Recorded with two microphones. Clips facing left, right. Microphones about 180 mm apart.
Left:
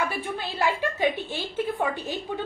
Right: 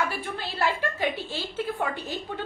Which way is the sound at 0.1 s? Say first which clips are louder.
Left 2 dB; 20° left (ahead or behind).